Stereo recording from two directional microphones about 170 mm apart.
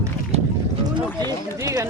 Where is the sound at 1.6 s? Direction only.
15° right (ahead or behind).